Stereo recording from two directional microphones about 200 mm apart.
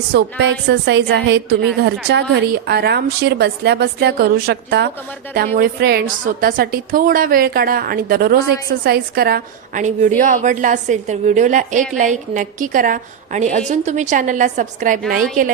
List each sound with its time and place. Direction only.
0.1 s a woman's voice: 60° right (ahead or behind); by 15.0 s 40° right (ahead or behind)